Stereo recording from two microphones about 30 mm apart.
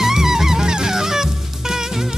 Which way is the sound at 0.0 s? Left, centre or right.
Centre.